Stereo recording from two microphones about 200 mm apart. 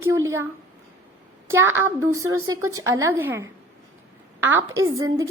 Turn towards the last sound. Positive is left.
turn(degrees=-15)  # may be behind; listen again after turning